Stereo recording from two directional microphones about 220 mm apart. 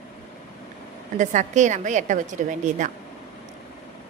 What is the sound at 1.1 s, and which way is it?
A woman's voice, 35° right (ahead or behind).